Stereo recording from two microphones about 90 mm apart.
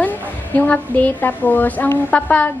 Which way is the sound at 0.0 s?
20° left (ahead or behind).